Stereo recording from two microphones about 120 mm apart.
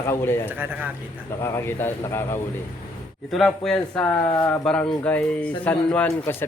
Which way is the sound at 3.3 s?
5° left (ahead or behind).